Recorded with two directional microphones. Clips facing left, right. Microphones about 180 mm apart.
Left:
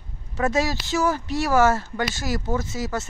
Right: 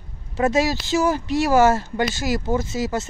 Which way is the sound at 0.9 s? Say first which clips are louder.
Right 3 dB; 20° right (ahead or behind).